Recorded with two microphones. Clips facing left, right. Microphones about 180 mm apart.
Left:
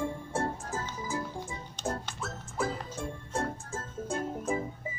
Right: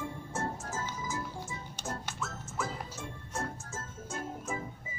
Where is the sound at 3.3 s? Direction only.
30° left (ahead or behind).